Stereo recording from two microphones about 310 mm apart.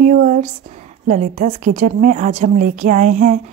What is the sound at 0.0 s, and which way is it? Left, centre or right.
Speech, right.